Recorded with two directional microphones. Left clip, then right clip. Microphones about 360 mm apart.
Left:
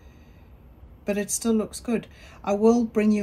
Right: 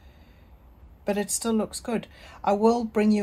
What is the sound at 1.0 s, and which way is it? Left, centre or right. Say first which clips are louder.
Speech: even; centre.